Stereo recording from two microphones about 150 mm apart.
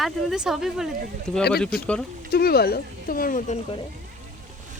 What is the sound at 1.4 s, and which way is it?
Speech, 90° left.